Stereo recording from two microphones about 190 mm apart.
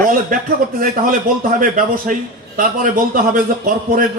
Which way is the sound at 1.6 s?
45° right (ahead or behind).